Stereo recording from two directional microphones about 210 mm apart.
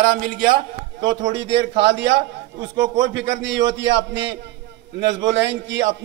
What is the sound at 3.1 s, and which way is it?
A man's voice, 55° right (ahead or behind).